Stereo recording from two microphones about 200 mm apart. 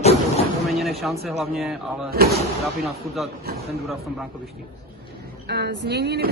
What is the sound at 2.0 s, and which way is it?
Speech, 50° right (ahead or behind).